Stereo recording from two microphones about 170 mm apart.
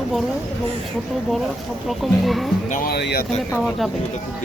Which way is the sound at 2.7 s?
55° left (ahead or behind).